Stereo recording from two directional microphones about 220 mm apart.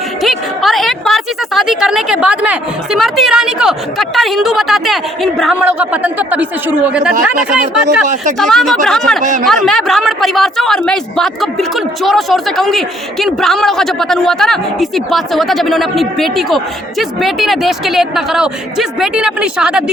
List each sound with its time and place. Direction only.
0.2 s a woman's voice: centre (ahead or behind)
8.0 s speech: 35° right (ahead or behind)
8.4 s a woman's voice: centre (ahead or behind)